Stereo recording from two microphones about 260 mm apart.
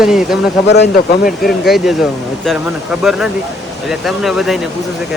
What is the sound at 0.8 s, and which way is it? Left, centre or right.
Speech, left.